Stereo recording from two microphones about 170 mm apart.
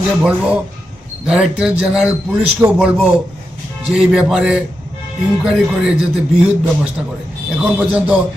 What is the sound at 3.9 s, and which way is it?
Speech, 5° right (ahead or behind).